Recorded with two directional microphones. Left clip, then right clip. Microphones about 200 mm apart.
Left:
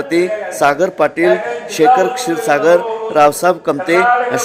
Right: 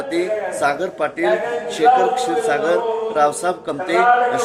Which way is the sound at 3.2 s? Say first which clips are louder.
Left 9 dB; 45° left (ahead or behind).